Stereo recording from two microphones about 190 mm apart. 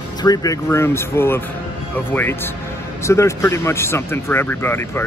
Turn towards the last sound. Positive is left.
turn(degrees=10)  # may be behind; listen again after turning